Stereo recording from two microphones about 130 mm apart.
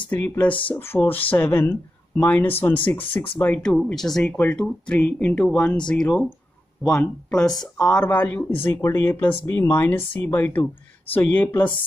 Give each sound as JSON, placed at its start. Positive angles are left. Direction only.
{"t": 0.7, "sound": "speech", "side_deg": 15}